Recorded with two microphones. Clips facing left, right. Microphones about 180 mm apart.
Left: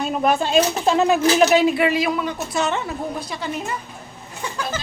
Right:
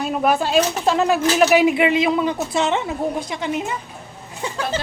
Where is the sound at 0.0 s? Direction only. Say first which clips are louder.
Right 1 dB; 5° right (ahead or behind).